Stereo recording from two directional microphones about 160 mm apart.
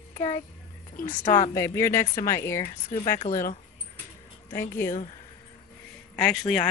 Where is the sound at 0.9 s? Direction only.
55° left (ahead or behind).